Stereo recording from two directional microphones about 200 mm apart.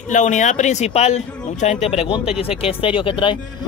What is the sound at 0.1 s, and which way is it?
Speech, 40° left (ahead or behind).